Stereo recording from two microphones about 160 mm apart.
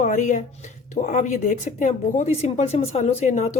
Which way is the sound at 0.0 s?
50° left (ahead or behind).